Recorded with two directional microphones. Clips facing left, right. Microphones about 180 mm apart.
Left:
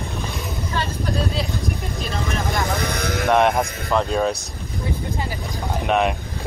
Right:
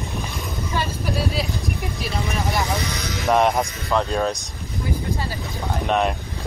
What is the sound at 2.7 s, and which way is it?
Speech, 55° left (ahead or behind).